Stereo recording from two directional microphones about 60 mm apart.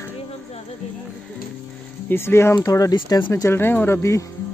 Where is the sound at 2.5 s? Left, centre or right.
Left.